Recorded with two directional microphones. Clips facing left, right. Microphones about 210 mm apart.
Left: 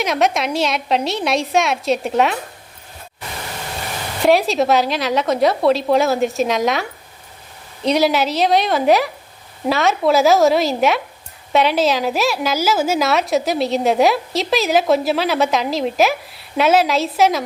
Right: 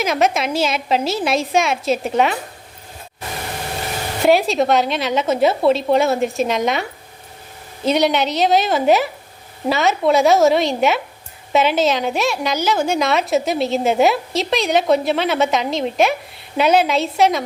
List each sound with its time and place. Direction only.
0.0 s a woman's voice: centre (ahead or behind)
4.3 s a woman's voice: centre (ahead or behind)
7.9 s a woman's voice: centre (ahead or behind)